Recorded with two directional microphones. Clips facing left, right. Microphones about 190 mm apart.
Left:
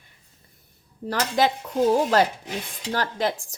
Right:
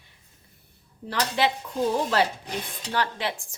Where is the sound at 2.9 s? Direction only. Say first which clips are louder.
Left 3 dB; 40° left (ahead or behind).